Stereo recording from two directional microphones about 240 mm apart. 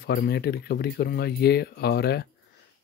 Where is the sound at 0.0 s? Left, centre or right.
Left.